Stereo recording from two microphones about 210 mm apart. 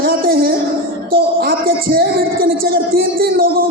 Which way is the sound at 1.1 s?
45° right (ahead or behind).